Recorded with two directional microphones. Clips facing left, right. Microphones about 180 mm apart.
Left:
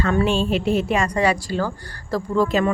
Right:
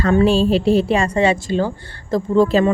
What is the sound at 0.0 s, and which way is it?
A woman's voice, 30° right (ahead or behind).